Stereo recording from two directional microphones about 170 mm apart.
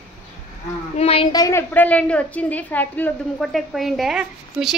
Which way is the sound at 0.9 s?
35° left (ahead or behind).